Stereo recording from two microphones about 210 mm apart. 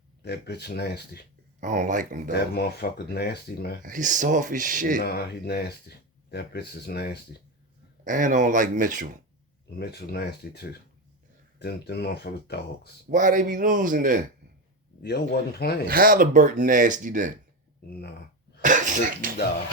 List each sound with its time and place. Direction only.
0.2 s speech: 50° left (ahead or behind)
1.6 s speech: 35° right (ahead or behind)
2.3 s speech: 50° left (ahead or behind)
3.8 s speech: 40° right (ahead or behind)
5.0 s speech: 50° left (ahead or behind)
8.0 s speech: 40° right (ahead or behind)
9.6 s speech: 50° left (ahead or behind)
13.1 s speech: 40° right (ahead or behind)
15.0 s speech: 50° left (ahead or behind)
15.9 s speech: 45° right (ahead or behind)
18.6 s speech: 40° right (ahead or behind)